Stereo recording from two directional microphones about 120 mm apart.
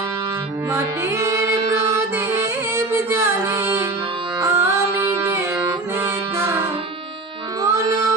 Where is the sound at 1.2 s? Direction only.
25° right (ahead or behind).